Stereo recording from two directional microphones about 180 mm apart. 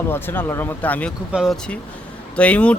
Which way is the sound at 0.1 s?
10° left (ahead or behind).